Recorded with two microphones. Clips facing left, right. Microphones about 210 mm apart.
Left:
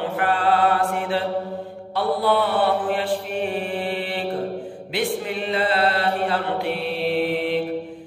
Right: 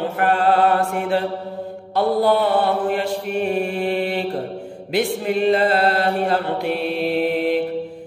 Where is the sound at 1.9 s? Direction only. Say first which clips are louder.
Right 4 dB; 45° right (ahead or behind).